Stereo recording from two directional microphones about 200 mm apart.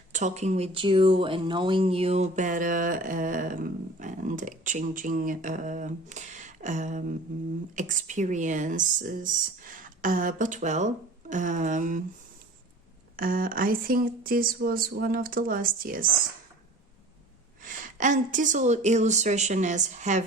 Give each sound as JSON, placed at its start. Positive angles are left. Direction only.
{"t": 0.1, "sound": "speech", "side_deg": -35}
{"t": 13.1, "sound": "speech", "side_deg": -45}
{"t": 17.6, "sound": "speech", "side_deg": -40}